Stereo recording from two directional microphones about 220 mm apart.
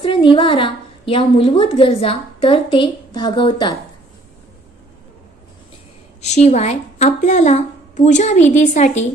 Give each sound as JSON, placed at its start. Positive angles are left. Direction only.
{"t": 0.0, "sound": "a woman's voice", "side_deg": 25}
{"t": 6.2, "sound": "a woman's voice", "side_deg": 30}